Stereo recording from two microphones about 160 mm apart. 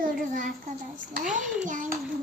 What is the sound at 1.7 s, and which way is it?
Child singing, 55° right (ahead or behind).